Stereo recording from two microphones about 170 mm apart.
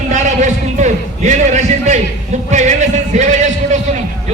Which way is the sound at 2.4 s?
45° right (ahead or behind).